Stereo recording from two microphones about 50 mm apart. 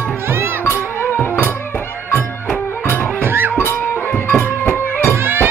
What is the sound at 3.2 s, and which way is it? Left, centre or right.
Music, right.